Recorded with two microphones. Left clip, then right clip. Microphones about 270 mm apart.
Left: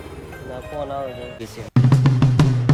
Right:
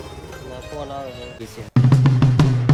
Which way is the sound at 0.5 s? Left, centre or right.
Centre.